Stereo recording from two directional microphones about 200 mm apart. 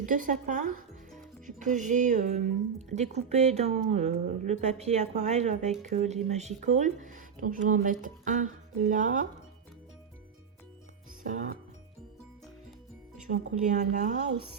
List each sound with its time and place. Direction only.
0.0 s speech: 40° right (ahead or behind)
11.3 s speech: 40° right (ahead or behind)
13.3 s speech: 40° right (ahead or behind)